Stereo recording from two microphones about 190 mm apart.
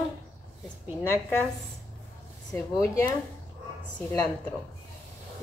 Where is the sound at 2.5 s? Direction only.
10° left (ahead or behind).